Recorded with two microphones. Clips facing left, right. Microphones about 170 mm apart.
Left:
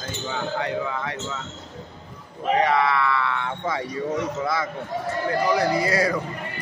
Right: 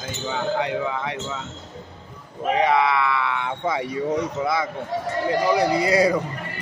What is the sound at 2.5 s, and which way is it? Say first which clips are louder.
Speech: right 1 dB; 15° right (ahead or behind).